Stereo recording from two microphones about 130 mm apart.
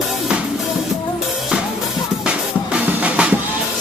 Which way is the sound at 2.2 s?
10° right (ahead or behind).